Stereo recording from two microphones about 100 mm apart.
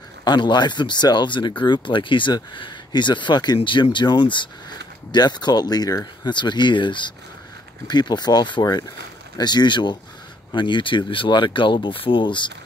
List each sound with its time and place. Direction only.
0.2 s speech: 50° left (ahead or behind)